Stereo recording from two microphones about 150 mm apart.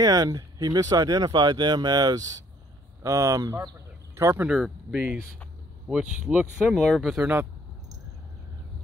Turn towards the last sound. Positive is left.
turn(degrees=-5)  # may be behind; listen again after turning